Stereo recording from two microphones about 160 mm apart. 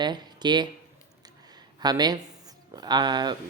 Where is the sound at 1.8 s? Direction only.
25° right (ahead or behind).